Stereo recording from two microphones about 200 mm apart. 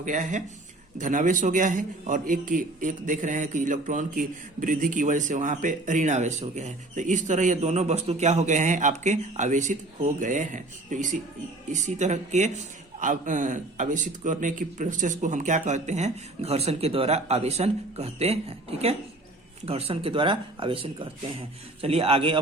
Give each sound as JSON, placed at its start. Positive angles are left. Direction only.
{"t": 0.0, "sound": "a man's voice", "side_deg": -40}